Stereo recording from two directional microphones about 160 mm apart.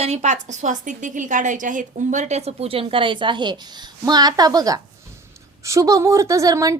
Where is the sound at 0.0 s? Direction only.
45° right (ahead or behind).